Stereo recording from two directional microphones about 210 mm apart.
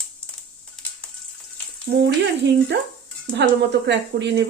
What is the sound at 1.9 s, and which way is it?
A woman's voice, 45° right (ahead or behind).